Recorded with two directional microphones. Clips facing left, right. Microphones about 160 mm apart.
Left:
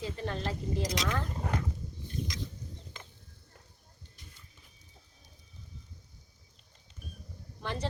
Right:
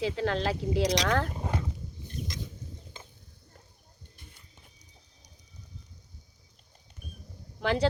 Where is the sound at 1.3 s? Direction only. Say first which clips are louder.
Right 1 dB; 15° right (ahead or behind).